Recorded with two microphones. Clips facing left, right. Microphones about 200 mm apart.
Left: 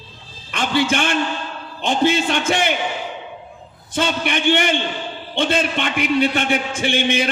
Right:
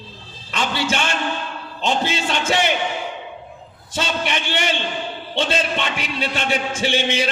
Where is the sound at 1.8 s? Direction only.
55° left (ahead or behind).